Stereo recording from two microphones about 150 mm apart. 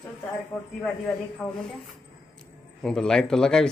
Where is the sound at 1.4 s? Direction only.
10° left (ahead or behind).